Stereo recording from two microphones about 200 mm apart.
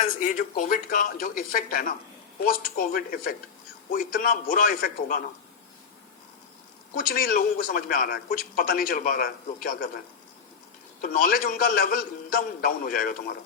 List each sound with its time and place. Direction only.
0.0 s a man's voice: 40° left (ahead or behind)
6.9 s a man's voice: 45° left (ahead or behind)
11.0 s a man's voice: 45° left (ahead or behind)